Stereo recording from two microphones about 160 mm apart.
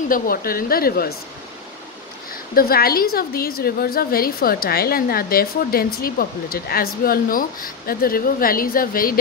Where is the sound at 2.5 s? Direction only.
70° left (ahead or behind).